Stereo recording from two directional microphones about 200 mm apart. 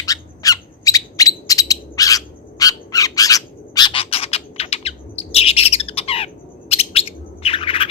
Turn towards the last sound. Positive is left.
turn(degrees=25)  # may be behind; listen again after turning